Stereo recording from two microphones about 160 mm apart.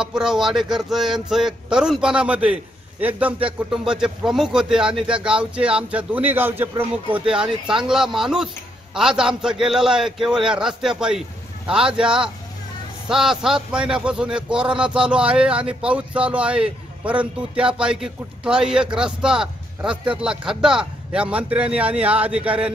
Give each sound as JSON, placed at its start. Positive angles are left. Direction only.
{"t": 0.0, "sound": "a man's voice", "side_deg": -5}